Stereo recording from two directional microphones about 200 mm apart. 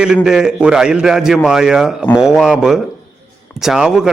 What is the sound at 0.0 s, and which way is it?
A man's voice, 5° right (ahead or behind).